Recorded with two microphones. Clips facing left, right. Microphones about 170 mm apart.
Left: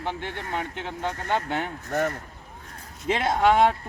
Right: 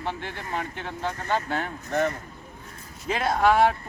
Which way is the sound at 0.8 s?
15° left (ahead or behind).